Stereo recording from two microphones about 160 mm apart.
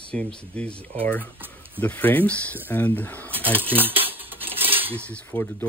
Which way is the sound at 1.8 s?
10° left (ahead or behind).